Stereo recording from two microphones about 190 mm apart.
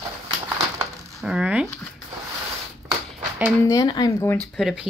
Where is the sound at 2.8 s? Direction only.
10° right (ahead or behind).